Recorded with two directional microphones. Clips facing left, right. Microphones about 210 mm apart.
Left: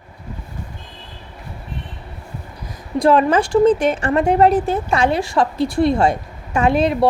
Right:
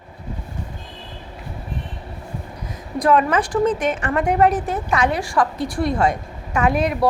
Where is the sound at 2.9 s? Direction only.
30° left (ahead or behind).